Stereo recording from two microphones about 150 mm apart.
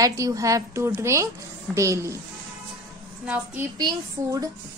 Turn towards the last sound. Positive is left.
turn(degrees=-25)  # may be behind; listen again after turning